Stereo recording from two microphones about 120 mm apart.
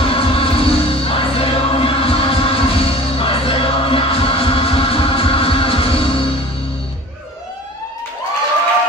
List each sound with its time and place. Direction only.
0.0 s music: 50° left (ahead or behind)